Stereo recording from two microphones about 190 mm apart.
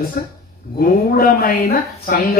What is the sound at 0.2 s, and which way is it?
Speech, 50° left (ahead or behind).